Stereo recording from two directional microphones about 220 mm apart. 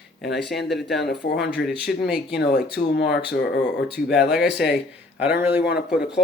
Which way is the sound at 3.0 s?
50° left (ahead or behind).